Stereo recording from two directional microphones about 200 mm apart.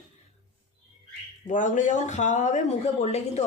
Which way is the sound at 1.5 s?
40° left (ahead or behind).